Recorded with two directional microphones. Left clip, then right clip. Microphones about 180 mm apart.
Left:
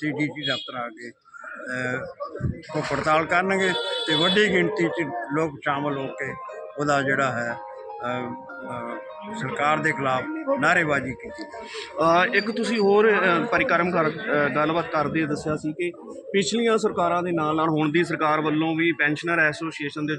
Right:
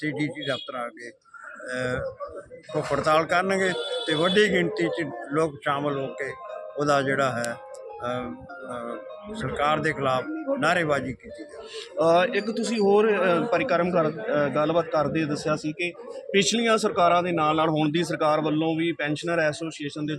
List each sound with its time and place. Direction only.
0.0 s speech: 10° right (ahead or behind)
9.3 s speech: 5° right (ahead or behind)
11.9 s a man's voice: 30° right (ahead or behind)